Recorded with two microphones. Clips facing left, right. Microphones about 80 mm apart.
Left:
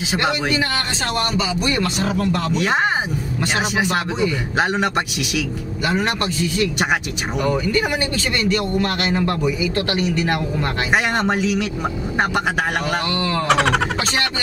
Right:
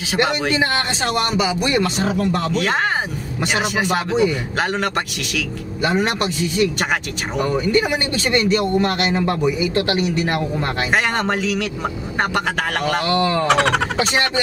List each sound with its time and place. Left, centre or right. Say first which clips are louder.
0.5 s a man's voice: right 2 dB; right
2.5 s a man's voice: left 1 dB; centre
7.9 s a man's voice: right 2 dB; right
10.9 s a man's voice: left 1 dB; centre